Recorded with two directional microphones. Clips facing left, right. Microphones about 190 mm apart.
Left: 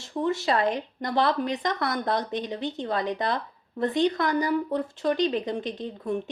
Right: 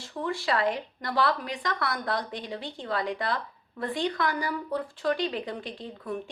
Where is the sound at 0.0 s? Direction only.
25° left (ahead or behind).